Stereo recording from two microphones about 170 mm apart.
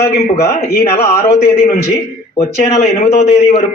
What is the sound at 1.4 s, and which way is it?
Speech, 65° left (ahead or behind).